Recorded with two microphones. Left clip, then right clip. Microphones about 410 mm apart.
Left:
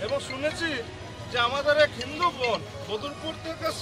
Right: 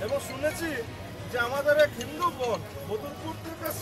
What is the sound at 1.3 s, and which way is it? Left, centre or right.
Speech, right.